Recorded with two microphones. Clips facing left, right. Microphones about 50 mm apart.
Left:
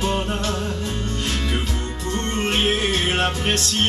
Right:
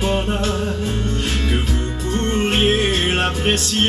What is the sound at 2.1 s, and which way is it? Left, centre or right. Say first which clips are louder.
Music: right 4 dB; centre.